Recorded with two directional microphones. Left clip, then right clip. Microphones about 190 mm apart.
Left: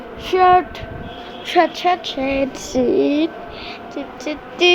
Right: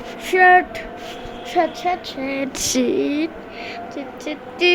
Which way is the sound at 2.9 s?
5° left (ahead or behind).